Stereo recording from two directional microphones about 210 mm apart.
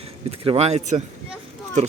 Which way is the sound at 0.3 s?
30° right (ahead or behind).